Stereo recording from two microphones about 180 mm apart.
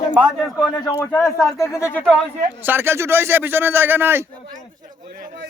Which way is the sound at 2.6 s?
10° right (ahead or behind).